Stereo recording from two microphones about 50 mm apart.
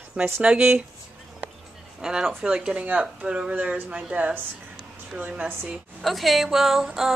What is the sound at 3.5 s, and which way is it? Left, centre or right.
Speech, right.